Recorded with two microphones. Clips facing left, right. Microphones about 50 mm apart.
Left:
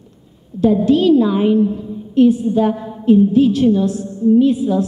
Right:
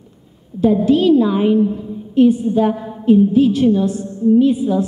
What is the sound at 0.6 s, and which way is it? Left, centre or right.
A woman's voice, centre.